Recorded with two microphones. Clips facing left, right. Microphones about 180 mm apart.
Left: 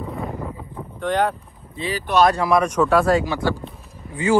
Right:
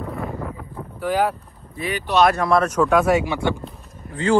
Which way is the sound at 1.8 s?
30° left (ahead or behind).